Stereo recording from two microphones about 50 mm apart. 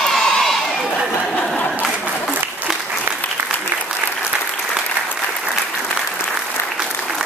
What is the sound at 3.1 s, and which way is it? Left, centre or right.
Applause, right.